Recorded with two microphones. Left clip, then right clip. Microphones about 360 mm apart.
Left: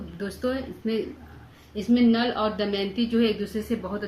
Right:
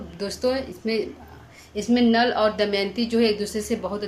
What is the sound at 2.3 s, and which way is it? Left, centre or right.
A woman's voice, centre.